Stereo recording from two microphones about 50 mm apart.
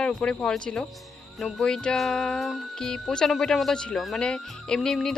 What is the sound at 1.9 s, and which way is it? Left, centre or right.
Music, centre.